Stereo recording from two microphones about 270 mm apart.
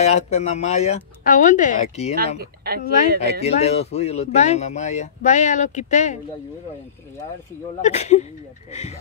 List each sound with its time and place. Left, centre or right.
0.0 s speech: left
2.1 s speech: right
3.3 s speech: left
7.8 s speech: left